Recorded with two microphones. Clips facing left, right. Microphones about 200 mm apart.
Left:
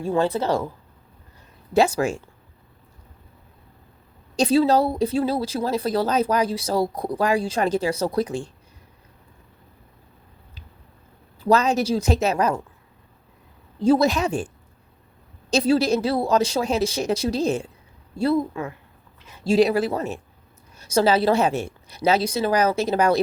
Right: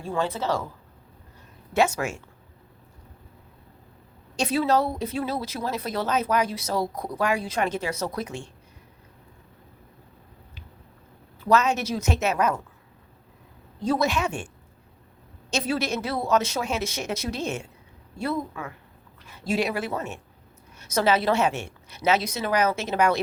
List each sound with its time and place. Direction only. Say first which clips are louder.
0.1 s a woman's voice: left 5 dB; 35° left (ahead or behind)
1.7 s a woman's voice: left 4 dB; 35° left (ahead or behind)
4.4 s a woman's voice: left 5 dB; 30° left (ahead or behind)
11.3 s a woman's voice: left 3 dB; 35° left (ahead or behind)
13.7 s a woman's voice: left 6 dB; 30° left (ahead or behind)